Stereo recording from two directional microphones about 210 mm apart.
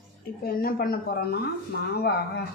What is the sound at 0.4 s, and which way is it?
Speech, 45° left (ahead or behind).